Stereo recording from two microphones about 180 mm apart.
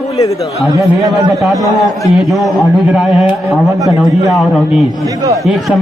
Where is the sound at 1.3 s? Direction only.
Centre (ahead or behind).